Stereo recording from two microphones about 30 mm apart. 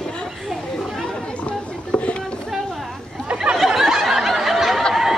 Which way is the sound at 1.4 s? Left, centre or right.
Left.